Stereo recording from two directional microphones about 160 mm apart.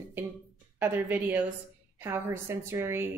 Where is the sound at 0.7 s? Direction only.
10° right (ahead or behind).